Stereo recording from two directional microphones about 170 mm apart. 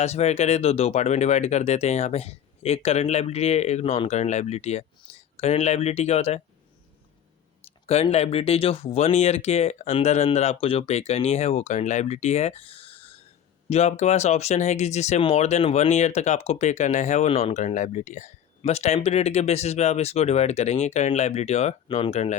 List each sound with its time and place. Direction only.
0.0 s speech: 40° left (ahead or behind)
7.9 s speech: 40° left (ahead or behind)